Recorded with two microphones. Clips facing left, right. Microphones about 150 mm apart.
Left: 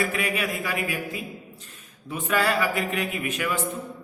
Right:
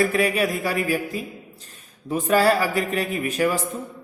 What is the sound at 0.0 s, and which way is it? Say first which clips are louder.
A man's voice: right 6 dB; 35° right (ahead or behind).